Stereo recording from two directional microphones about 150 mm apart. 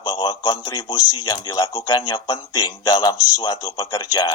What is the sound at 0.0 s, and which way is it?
A man's voice, 25° left (ahead or behind).